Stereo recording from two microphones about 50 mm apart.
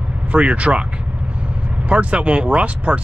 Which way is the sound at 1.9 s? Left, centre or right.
Right.